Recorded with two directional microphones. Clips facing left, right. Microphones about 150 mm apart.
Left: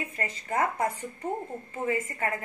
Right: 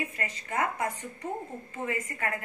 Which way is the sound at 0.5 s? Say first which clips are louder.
Left 3 dB; 30° left (ahead or behind).